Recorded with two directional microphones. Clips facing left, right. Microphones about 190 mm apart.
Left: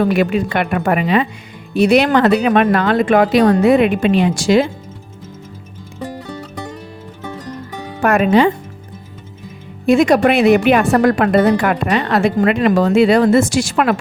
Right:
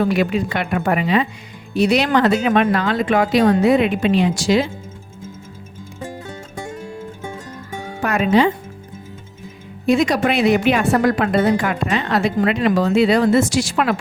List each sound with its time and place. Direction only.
0.0 s a woman's voice: 55° left (ahead or behind)
8.0 s a woman's voice: 55° left (ahead or behind)
9.8 s a woman's voice: 55° left (ahead or behind)